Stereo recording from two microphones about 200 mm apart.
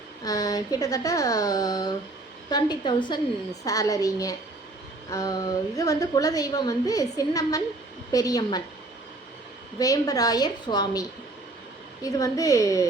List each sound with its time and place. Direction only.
0.3 s a woman's voice: 20° left (ahead or behind)
9.7 s a woman's voice: 20° left (ahead or behind)
12.0 s a woman's voice: 15° left (ahead or behind)